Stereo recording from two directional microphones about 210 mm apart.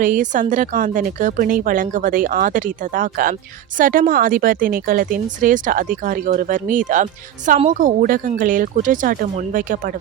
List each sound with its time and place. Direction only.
0.0 s speech: 40° right (ahead or behind)